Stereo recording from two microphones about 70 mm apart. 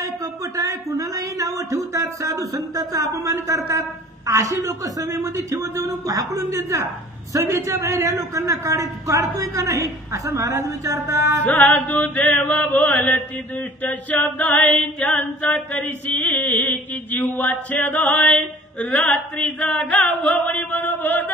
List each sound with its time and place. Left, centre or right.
0.2 s a sound: right
4.3 s a man's voice: right
11.1 s music: right
11.4 s chant: left